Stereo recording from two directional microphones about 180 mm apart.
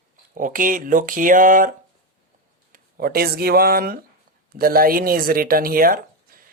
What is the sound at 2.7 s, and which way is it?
A woman's voice, 55° right (ahead or behind).